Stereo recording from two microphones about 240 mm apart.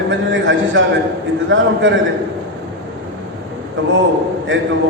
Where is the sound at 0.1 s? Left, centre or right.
Right.